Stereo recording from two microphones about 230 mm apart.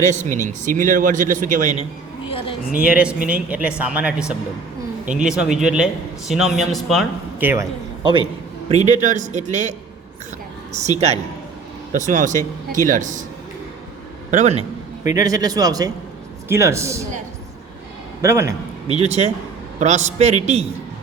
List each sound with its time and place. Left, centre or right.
0.1 s speech: right
2.8 s a man's voice: centre
8.7 s a man's voice: right
14.3 s a man's voice: right
15.0 s a man's voice: centre
18.2 s a man's voice: centre
18.9 s a man's voice: right